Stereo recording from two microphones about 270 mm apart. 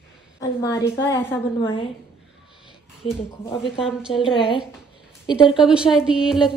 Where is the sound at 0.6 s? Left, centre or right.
Centre.